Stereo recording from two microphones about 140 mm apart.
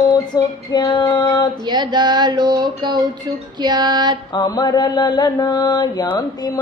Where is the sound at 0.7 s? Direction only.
30° left (ahead or behind).